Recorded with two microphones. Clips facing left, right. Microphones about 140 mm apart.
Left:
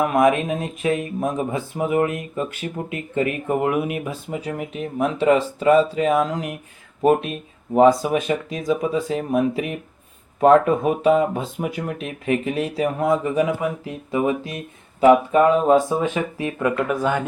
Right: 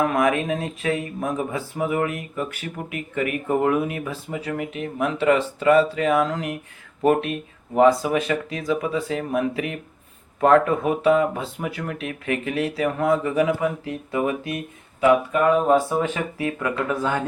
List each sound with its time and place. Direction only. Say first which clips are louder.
0.0 s speech: left 3 dB; 20° left (ahead or behind)
15.7 s speech: left 2 dB; 20° left (ahead or behind)